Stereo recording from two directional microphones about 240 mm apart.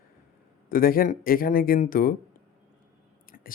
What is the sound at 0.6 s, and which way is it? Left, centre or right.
Speech, left.